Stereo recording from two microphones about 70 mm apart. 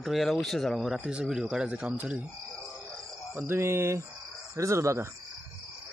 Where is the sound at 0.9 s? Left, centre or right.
Centre.